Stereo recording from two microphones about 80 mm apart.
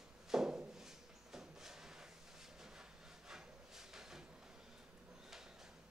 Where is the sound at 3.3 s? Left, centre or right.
Centre.